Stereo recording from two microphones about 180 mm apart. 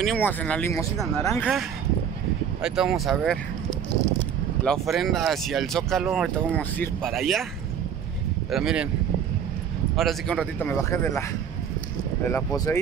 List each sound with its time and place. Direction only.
0.0 s speech: 5° left (ahead or behind)
4.6 s speech: centre (ahead or behind)
8.5 s speech: centre (ahead or behind)
9.9 s speech: centre (ahead or behind)
12.3 s speech: 5° left (ahead or behind)
12.5 s speech: 20° left (ahead or behind)